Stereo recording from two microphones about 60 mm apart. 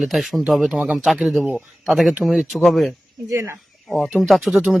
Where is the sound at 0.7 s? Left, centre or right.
Right.